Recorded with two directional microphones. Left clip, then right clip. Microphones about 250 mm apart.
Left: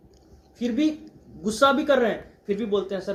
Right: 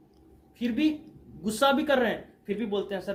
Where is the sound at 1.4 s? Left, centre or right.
Right.